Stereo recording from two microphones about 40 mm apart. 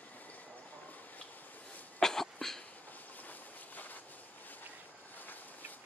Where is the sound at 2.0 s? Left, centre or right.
Centre.